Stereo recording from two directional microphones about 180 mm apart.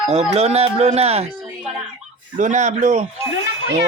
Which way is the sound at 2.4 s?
40° right (ahead or behind).